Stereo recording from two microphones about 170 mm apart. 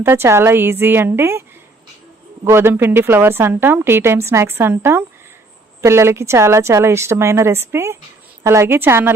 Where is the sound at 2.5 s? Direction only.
15° right (ahead or behind).